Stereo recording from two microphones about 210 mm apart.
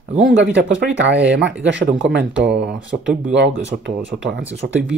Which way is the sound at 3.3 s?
55° right (ahead or behind).